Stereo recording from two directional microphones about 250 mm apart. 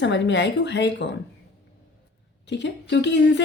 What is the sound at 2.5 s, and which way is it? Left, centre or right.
Speech, left.